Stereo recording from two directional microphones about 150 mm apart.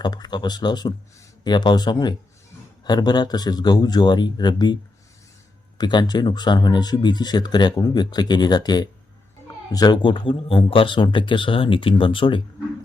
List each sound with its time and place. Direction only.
0.0 s speech: 30° left (ahead or behind)